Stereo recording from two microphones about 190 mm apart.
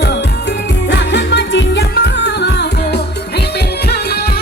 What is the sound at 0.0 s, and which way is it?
Music, 60° left (ahead or behind).